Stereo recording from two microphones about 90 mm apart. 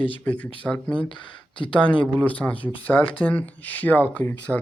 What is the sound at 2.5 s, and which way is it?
Speech, 75° left (ahead or behind).